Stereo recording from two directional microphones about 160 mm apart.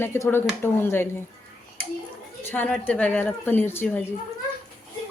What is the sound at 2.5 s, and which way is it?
Speech, 10° left (ahead or behind).